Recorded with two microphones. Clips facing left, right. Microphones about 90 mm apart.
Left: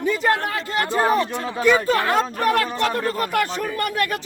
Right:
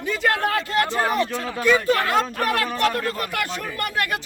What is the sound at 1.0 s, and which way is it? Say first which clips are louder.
A man's voice: left 3 dB; 30° left (ahead or behind).